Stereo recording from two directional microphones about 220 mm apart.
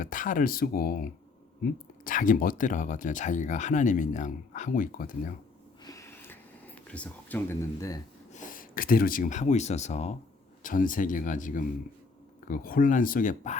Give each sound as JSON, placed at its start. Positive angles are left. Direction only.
{"t": 0.0, "sound": "speech", "side_deg": 35}
{"t": 2.0, "sound": "speech", "side_deg": 35}
{"t": 5.8, "sound": "snort", "side_deg": 15}
{"t": 6.8, "sound": "speech", "side_deg": 5}
{"t": 8.3, "sound": "speech", "side_deg": 35}